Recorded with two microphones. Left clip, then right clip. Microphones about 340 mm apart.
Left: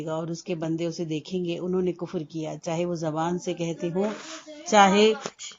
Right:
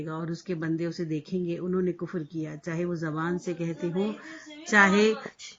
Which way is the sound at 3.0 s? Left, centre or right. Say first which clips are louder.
Left 4 dB; centre.